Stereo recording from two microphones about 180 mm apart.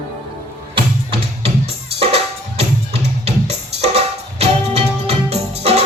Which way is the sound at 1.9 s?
35° right (ahead or behind).